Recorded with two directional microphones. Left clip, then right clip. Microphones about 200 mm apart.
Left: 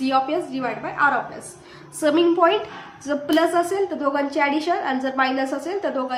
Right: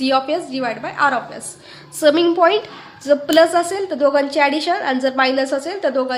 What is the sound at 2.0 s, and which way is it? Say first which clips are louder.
A woman's voice: right 4 dB; 30° right (ahead or behind).